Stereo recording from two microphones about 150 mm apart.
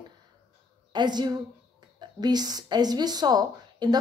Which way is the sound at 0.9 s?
30° right (ahead or behind).